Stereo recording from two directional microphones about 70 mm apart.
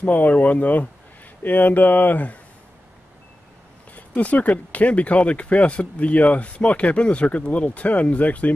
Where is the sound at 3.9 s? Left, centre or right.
Left.